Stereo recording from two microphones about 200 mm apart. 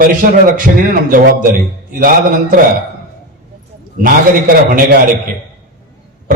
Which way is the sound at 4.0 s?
45° right (ahead or behind).